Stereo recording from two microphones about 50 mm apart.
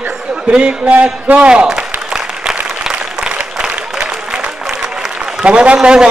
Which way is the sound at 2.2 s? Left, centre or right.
Centre.